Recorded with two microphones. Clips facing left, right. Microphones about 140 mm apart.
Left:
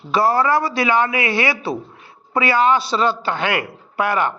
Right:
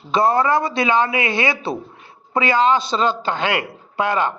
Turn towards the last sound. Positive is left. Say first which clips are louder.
# even
turn(degrees=-20)  # may be behind; listen again after turning